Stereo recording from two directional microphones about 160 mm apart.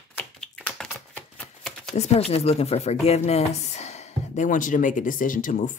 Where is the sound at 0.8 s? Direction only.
5° left (ahead or behind).